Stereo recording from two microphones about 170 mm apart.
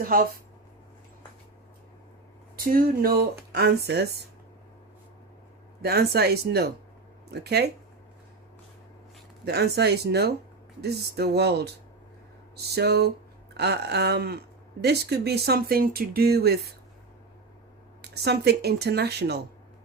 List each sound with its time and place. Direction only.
0.0 s speech: 60° right (ahead or behind)
2.6 s speech: 60° right (ahead or behind)
5.8 s speech: 70° right (ahead or behind)
9.4 s speech: 75° right (ahead or behind)
18.0 s speech: 75° right (ahead or behind)